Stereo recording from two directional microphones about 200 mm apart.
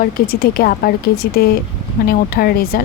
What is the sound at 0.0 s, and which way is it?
Speech, 50° left (ahead or behind).